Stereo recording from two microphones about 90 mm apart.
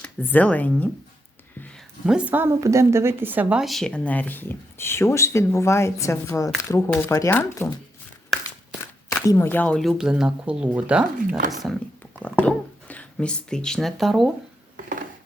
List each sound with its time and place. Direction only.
0.2 s speech: 20° left (ahead or behind)
2.0 s speech: 10° right (ahead or behind)
2.3 s speech: 25° right (ahead or behind)
3.6 s speech: centre (ahead or behind)
3.9 s speech: 15° left (ahead or behind)
8.8 s a sound: 40° left (ahead or behind)
9.5 s speech: 15° left (ahead or behind)
9.8 s speech: 5° right (ahead or behind)
12.2 s speech: 15° left (ahead or behind); by 14.3 s centre (ahead or behind)